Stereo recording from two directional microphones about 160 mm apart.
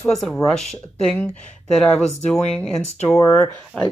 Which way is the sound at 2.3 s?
5° left (ahead or behind).